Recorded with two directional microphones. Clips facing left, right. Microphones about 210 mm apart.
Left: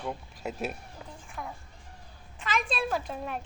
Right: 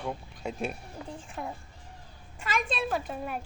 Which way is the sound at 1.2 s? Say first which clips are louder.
Right 1 dB; 30° right (ahead or behind).